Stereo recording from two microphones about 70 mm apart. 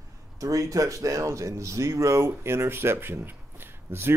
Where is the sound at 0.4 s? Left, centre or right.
Right.